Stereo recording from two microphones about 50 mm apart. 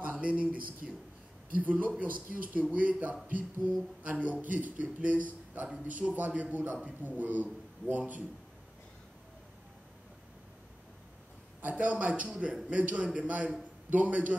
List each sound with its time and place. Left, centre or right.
0.2 s a man's voice: right
11.7 s a man's voice: right